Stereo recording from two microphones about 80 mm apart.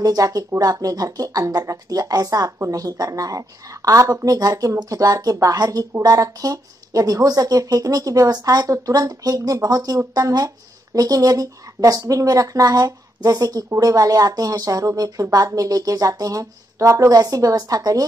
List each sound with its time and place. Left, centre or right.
0.0 s speech: right